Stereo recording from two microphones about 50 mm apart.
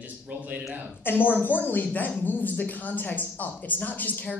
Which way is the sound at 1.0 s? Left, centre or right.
Left.